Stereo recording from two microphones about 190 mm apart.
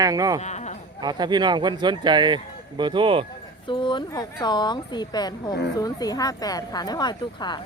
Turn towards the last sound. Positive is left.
turn(degrees=25)  # may be behind; listen again after turning